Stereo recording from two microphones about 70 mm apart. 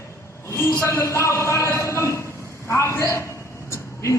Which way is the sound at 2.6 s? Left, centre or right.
Left.